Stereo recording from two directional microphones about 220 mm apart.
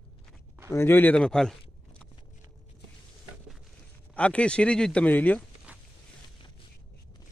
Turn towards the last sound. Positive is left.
turn(degrees=5)  # may be behind; listen again after turning